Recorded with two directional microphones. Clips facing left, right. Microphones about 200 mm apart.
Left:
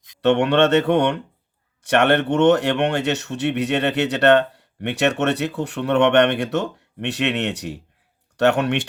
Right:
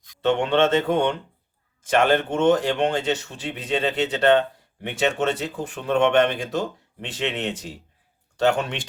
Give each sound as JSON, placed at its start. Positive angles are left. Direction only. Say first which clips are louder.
{"t": 0.2, "sound": "speech", "louder": "left 3 dB", "side_deg": 70}